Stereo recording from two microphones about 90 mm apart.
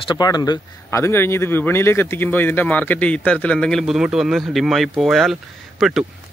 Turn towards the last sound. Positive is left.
turn(degrees=-5)  # may be behind; listen again after turning